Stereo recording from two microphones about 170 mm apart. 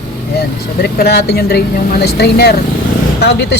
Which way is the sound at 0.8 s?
75° left (ahead or behind).